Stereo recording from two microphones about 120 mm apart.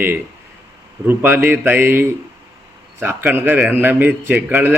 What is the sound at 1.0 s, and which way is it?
A man's voice, 15° right (ahead or behind).